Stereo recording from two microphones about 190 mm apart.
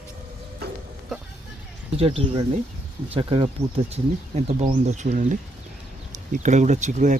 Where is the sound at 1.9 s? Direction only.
30° right (ahead or behind).